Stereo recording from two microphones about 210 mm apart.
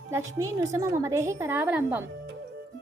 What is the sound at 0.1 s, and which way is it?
A woman's voice, 15° right (ahead or behind).